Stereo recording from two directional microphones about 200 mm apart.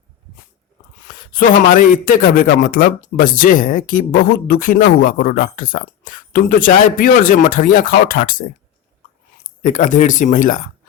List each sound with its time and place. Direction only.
1.0 s a man's voice: 40° left (ahead or behind)
9.6 s speech: 40° left (ahead or behind)